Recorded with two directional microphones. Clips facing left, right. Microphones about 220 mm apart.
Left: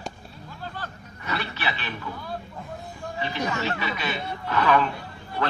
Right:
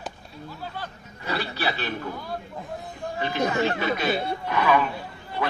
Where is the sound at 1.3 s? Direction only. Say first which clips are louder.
Right 3 dB; 35° right (ahead or behind).